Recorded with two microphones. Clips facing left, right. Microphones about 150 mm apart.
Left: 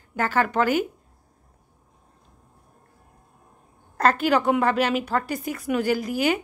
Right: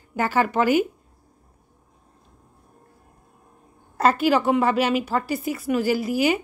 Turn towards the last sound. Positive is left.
turn(degrees=-5)  # may be behind; listen again after turning